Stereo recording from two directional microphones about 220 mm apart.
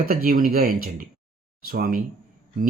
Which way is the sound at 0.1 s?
40° right (ahead or behind).